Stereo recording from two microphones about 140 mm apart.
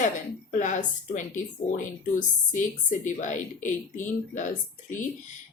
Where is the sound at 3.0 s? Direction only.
60° left (ahead or behind).